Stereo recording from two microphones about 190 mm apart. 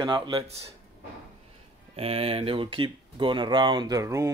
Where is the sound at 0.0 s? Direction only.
25° right (ahead or behind).